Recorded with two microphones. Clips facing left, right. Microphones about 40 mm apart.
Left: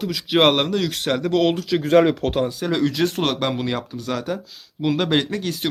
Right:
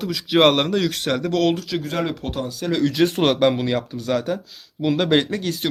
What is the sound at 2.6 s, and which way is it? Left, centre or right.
Speech, centre.